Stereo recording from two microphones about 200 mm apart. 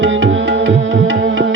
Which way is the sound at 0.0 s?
75° right (ahead or behind).